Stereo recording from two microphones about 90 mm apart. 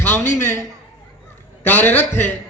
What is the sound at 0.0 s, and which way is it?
Speech, 25° left (ahead or behind).